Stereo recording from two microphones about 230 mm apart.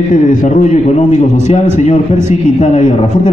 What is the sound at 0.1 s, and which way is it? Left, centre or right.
A man's voice, left.